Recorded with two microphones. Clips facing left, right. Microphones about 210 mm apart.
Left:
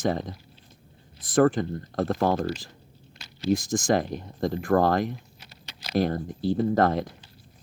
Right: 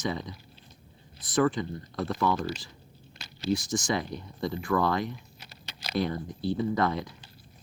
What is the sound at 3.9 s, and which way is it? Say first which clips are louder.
Speech: left 6 dB; 45° left (ahead or behind).